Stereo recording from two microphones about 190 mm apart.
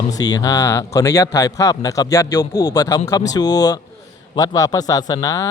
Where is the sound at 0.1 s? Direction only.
20° left (ahead or behind).